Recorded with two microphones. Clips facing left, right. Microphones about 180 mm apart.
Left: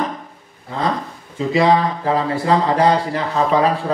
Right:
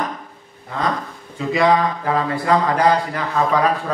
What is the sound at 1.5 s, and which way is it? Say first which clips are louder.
Speech: left 1 dB; 30° left (ahead or behind).